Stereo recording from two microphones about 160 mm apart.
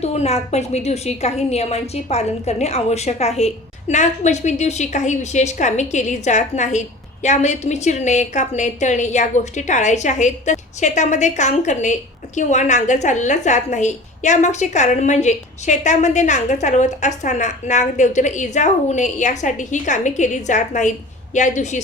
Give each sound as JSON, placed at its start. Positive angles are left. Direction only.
{"t": 0.0, "sound": "a woman's voice", "side_deg": 45}